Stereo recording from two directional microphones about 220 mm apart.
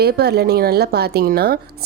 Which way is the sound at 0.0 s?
45° right (ahead or behind).